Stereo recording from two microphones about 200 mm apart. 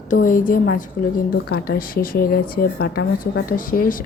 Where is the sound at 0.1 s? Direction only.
45° left (ahead or behind).